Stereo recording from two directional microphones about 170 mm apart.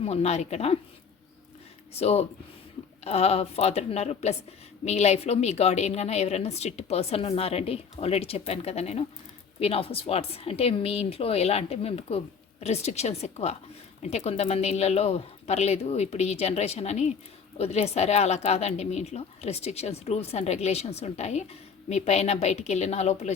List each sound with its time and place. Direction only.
0.0 s speech: 40° left (ahead or behind)
1.9 s speech: 35° left (ahead or behind)